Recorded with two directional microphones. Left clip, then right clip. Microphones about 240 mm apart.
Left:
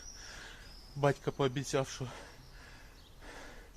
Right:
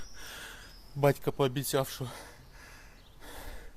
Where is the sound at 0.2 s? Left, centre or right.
Right.